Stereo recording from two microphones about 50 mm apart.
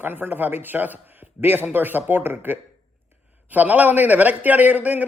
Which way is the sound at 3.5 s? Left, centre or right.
Right.